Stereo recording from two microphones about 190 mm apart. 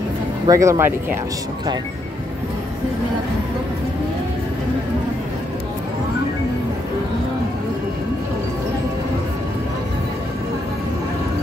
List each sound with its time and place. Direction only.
0.5 s speech: 15° right (ahead or behind)